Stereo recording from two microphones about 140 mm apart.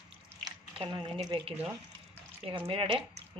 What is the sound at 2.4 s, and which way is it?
Speech, 40° right (ahead or behind).